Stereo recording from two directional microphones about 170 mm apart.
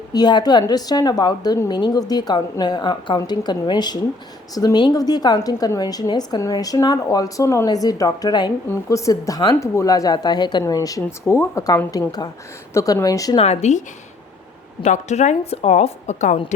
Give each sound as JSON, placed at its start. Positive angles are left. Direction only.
{"t": 0.1, "sound": "a woman's voice", "side_deg": 25}
{"t": 13.4, "sound": "a woman's voice", "side_deg": 40}